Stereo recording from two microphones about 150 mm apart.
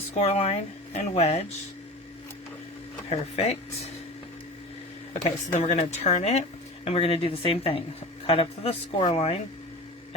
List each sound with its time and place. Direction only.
0.1 s speech: 45° left (ahead or behind)
3.1 s speech: 45° left (ahead or behind)
5.1 s a woman's voice: 55° left (ahead or behind)